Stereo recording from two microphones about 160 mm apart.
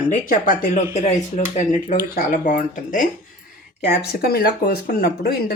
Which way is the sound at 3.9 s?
85° left.